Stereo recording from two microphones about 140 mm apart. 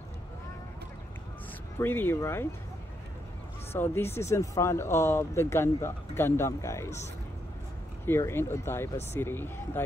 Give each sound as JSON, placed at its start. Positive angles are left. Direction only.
{"t": 1.8, "sound": "speech", "side_deg": 15}
{"t": 3.7, "sound": "speech", "side_deg": 15}
{"t": 8.0, "sound": "speech", "side_deg": 15}